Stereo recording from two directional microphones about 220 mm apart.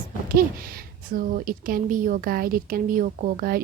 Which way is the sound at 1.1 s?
40° right (ahead or behind).